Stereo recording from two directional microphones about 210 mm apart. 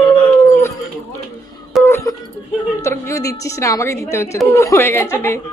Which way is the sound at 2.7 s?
15° left (ahead or behind).